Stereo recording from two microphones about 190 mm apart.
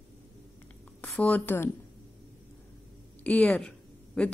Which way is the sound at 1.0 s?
5° left (ahead or behind).